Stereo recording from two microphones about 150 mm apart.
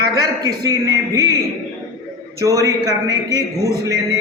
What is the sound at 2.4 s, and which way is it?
A man's voice, 20° right (ahead or behind).